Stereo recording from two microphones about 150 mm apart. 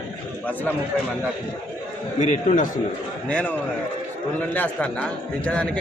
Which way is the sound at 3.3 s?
10° left (ahead or behind).